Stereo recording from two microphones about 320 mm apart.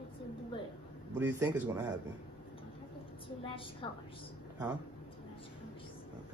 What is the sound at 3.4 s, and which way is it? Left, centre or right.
Speech, centre.